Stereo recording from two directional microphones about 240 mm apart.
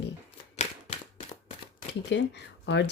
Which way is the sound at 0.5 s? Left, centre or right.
Left.